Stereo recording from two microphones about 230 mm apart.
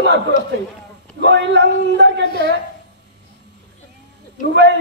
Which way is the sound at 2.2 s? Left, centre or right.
Left.